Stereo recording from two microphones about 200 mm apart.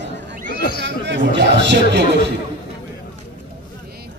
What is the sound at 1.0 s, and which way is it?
A man's voice, 60° right (ahead or behind).